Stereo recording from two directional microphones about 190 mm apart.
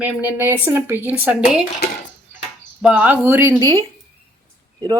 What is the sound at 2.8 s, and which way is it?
Speech, 10° right (ahead or behind).